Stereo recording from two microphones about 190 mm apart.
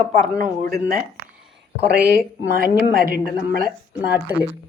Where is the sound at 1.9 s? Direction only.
55° right (ahead or behind).